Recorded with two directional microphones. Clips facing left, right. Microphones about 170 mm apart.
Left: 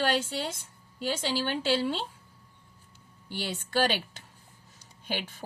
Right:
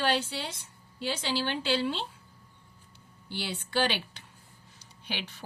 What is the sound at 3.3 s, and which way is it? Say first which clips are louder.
A woman's voice: left 2 dB; 45° left (ahead or behind).